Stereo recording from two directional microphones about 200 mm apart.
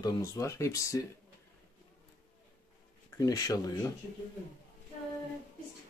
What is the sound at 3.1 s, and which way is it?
Speech, 20° left (ahead or behind).